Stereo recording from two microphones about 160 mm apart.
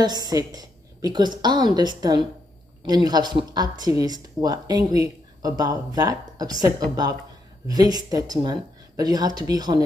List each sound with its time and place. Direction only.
0.0 s speech: 25° right (ahead or behind)